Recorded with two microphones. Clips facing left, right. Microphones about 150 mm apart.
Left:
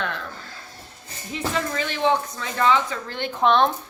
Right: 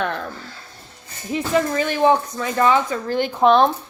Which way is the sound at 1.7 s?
45° right (ahead or behind).